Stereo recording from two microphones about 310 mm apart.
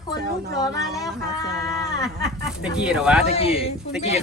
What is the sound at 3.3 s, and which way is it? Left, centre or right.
Speech, centre.